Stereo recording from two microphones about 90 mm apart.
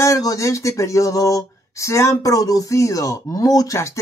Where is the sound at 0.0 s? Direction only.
40° left (ahead or behind).